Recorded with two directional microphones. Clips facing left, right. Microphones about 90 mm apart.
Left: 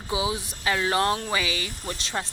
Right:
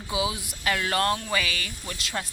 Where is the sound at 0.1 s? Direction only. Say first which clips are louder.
Left 1 dB; 30° left (ahead or behind).